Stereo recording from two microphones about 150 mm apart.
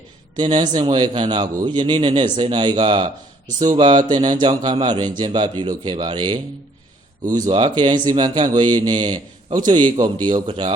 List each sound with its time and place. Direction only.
0.3 s a man's voice: 30° right (ahead or behind)